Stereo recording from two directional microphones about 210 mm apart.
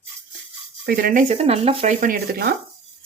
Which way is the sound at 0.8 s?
45° right (ahead or behind).